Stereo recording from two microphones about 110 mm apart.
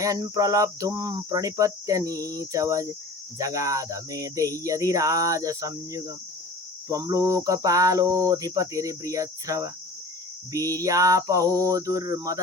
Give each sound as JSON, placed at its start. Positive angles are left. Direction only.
{"t": 0.0, "sound": "cricket", "side_deg": -30}